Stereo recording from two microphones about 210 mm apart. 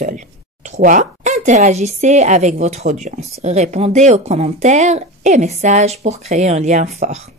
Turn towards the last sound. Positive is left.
turn(degrees=-35)  # may be behind; listen again after turning